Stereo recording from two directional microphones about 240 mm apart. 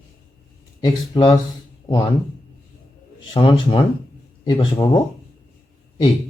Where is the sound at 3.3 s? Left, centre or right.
Centre.